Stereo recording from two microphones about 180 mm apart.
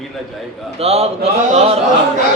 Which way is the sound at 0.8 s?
35° right (ahead or behind).